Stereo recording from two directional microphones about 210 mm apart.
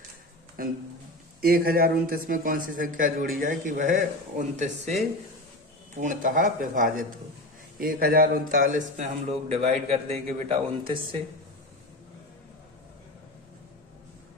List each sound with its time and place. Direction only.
1.4 s a man's voice: 45° right (ahead or behind); by 11.0 s 25° right (ahead or behind)